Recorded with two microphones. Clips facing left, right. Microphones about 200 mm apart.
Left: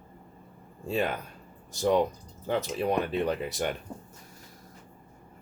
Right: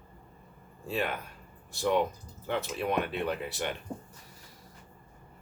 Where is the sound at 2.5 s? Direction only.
40° left (ahead or behind).